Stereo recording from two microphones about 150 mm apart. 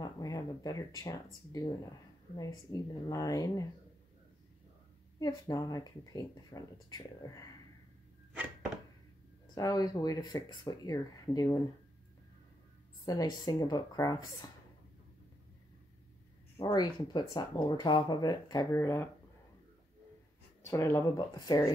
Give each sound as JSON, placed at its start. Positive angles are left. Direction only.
{"t": 0.0, "sound": "speech", "side_deg": 25}
{"t": 5.2, "sound": "speech", "side_deg": 25}
{"t": 9.6, "sound": "speech", "side_deg": 25}
{"t": 13.0, "sound": "speech", "side_deg": 25}
{"t": 16.5, "sound": "speech", "side_deg": 30}
{"t": 20.7, "sound": "speech", "side_deg": 20}